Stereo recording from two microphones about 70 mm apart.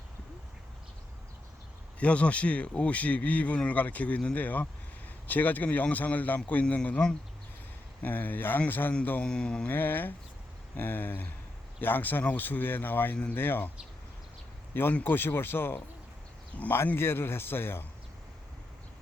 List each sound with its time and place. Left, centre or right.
2.0 s speech: centre
9.6 s speech: left
14.7 s speech: left